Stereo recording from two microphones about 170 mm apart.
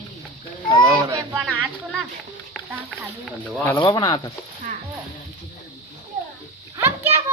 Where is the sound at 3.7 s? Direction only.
25° left (ahead or behind).